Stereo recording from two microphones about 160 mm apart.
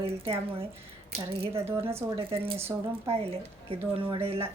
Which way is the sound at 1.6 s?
15° right (ahead or behind).